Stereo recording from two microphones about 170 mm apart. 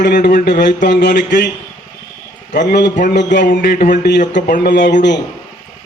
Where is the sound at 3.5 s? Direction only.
65° left (ahead or behind).